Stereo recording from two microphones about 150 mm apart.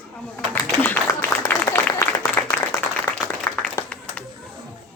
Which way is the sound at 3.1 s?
25° left (ahead or behind).